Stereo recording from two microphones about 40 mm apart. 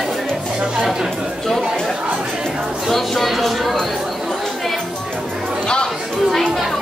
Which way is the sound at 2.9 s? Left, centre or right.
Centre.